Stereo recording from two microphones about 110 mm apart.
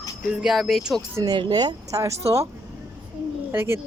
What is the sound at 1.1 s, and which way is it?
A woman's voice, 40° right (ahead or behind).